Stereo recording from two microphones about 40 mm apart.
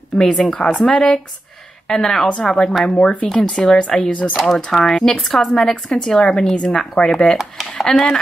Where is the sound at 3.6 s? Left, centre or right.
Centre.